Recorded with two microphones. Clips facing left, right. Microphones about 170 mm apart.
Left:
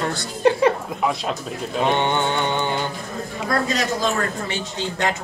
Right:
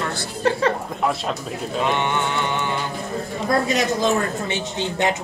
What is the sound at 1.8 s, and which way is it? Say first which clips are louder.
Mantra: left 3 dB; 30° left (ahead or behind).